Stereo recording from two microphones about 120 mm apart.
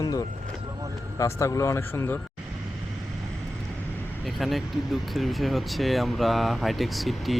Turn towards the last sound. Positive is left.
turn(degrees=0)  # may be behind; listen again after turning